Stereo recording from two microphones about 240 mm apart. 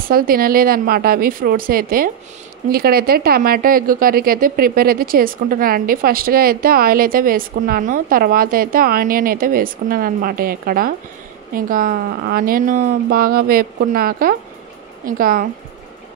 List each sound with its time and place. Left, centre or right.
0.1 s speech: right